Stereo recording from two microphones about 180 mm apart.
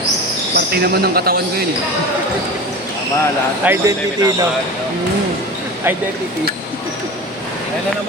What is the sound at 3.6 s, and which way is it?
Speech, 15° right (ahead or behind).